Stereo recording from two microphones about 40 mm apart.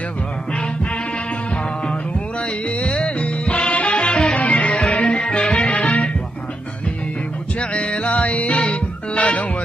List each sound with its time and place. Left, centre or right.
2.8 s music: left
4.4 s music: left
7.7 s music: left